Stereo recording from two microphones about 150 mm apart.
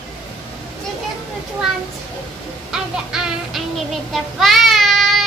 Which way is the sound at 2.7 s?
5° right (ahead or behind).